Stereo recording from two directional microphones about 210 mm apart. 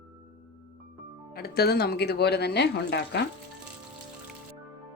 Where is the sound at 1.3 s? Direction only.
50° left (ahead or behind).